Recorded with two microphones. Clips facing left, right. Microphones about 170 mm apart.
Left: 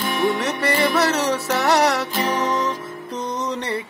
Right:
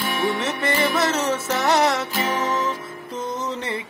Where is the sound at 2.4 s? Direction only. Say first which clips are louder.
Left 2 dB; 20° left (ahead or behind).